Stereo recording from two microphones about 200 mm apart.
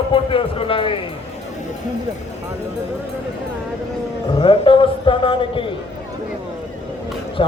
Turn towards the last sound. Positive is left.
turn(degrees=25)  # may be behind; listen again after turning